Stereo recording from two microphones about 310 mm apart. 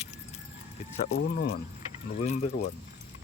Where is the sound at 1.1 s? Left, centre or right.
Left.